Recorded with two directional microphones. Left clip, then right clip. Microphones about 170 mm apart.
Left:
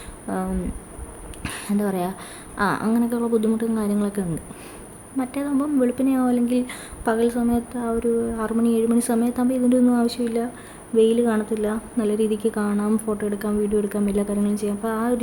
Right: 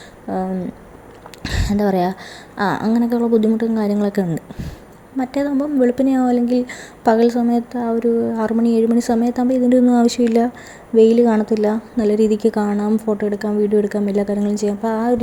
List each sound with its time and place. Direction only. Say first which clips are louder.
0.3 s speech: right 5 dB; 20° right (ahead or behind)
1.5 s a woman's voice: right 7 dB; 30° right (ahead or behind)
10.9 s speech: right 6 dB; 25° right (ahead or behind)